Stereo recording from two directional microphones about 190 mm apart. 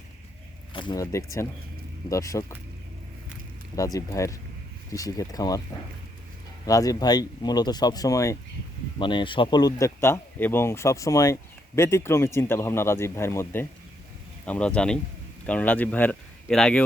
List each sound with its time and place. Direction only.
0.7 s speech: 25° left (ahead or behind)
1.0 s speech: 15° left (ahead or behind)
3.8 s speech: 20° left (ahead or behind)
6.7 s speech: 20° left (ahead or behind)